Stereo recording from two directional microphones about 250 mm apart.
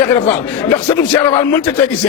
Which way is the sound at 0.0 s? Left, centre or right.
Centre.